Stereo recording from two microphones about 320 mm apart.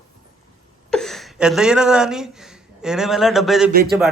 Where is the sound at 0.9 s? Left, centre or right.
Centre.